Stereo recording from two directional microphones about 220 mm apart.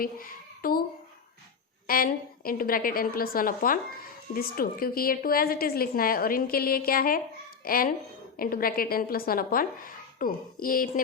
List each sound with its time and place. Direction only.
0.0 s a child's voice: 40° left (ahead or behind)
1.9 s a woman's voice: 40° left (ahead or behind)